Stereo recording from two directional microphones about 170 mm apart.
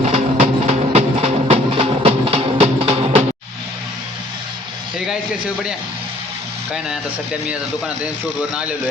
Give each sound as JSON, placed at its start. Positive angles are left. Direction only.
{"t": 0.1, "sound": "music", "side_deg": -40}